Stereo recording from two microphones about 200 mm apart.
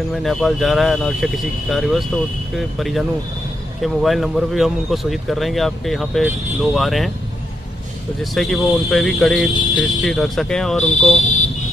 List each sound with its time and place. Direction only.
0.1 s speech: centre (ahead or behind)
8.2 s speech: centre (ahead or behind)